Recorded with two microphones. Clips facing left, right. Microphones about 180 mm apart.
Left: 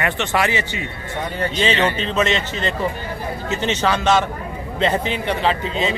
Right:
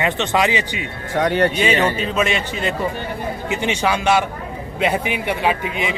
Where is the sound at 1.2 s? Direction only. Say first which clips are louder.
Right 8 dB; 85° right.